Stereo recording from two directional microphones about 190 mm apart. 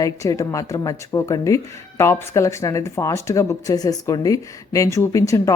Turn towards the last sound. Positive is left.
turn(degrees=15)  # may be behind; listen again after turning